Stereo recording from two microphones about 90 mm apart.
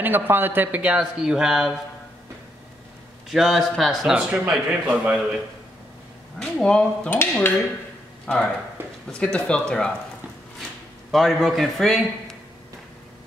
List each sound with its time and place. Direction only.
0.0 s speech: 20° right (ahead or behind); by 1.8 s 5° right (ahead or behind)
3.3 s speech: centre (ahead or behind)
6.4 s speech: 10° left (ahead or behind)
7.2 s dishes: 25° left (ahead or behind)
8.3 s speech: 10° left (ahead or behind)
8.8 s a man's voice: 25° right (ahead or behind)
9.2 s speech: 10° left (ahead or behind)
11.1 s speech: centre (ahead or behind)